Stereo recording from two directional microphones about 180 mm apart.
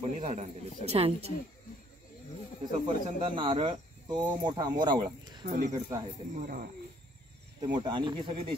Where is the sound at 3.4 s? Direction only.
30° right (ahead or behind).